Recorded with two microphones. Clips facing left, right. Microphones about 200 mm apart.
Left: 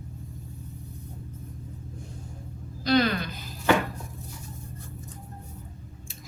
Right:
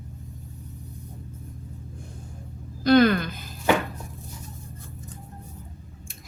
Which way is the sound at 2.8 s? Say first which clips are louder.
Right 6 dB; 50° right (ahead or behind).